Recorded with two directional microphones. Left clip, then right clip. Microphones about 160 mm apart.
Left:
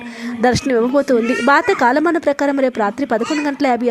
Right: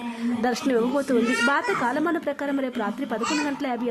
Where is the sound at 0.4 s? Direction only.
35° left (ahead or behind).